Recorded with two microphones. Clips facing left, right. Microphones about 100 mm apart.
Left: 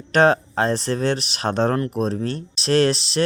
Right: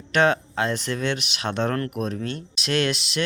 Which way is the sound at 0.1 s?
40° left (ahead or behind).